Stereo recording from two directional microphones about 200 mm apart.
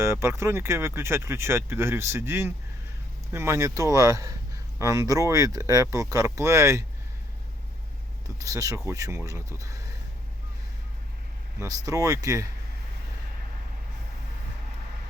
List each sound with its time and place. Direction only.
0.0 s speech: 15° right (ahead or behind)
8.4 s speech: 15° right (ahead or behind)
11.6 s speech: 15° right (ahead or behind)